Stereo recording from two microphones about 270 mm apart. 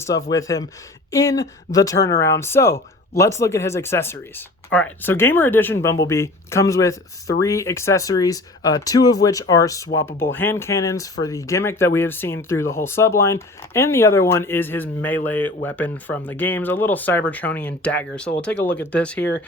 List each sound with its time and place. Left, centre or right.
0.3 s speech: centre